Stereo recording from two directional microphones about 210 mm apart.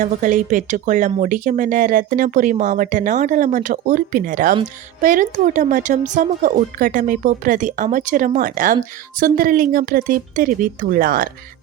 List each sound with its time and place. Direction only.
0.0 s speech: 40° right (ahead or behind)